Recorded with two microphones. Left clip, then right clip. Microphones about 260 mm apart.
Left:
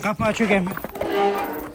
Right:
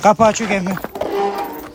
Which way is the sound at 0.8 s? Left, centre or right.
Right.